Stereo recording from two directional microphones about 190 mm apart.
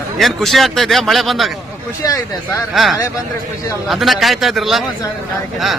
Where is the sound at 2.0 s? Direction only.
20° left (ahead or behind).